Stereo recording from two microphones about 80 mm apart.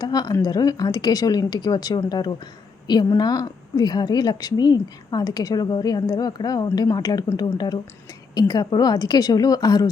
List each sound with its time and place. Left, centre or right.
0.0 s a woman's voice: left
3.1 s a woman's voice: left